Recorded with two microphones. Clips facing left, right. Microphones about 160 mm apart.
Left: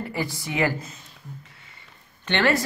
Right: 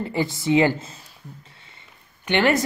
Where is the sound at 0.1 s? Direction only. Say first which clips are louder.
Right 9 dB; 25° right (ahead or behind).